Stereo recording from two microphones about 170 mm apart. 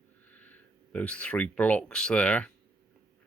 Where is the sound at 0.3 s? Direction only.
10° left (ahead or behind).